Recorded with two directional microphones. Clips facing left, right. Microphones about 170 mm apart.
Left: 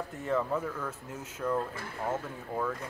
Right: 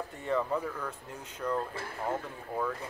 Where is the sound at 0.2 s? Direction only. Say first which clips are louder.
Even; centre (ahead or behind).